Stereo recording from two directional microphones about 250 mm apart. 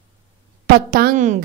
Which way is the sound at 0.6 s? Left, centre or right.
Right.